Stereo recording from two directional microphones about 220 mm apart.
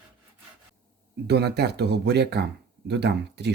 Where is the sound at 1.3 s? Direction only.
45° right (ahead or behind).